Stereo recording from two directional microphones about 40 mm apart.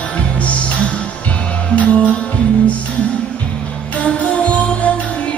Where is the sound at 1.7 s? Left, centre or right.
Left.